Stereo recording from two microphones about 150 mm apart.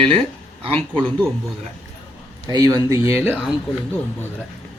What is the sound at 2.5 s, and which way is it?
Speech, 25° right (ahead or behind).